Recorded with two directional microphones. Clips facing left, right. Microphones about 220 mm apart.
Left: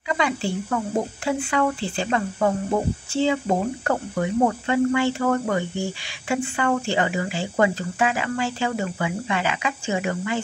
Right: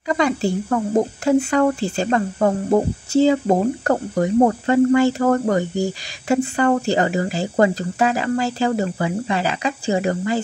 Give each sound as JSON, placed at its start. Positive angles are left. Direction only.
{"t": 0.1, "sound": "speech", "side_deg": -40}